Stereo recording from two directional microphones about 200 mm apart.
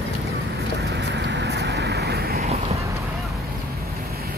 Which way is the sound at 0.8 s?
55° right (ahead or behind).